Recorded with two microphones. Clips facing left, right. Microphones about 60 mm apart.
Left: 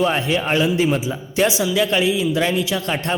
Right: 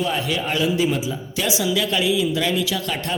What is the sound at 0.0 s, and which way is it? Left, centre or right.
A man's voice, left.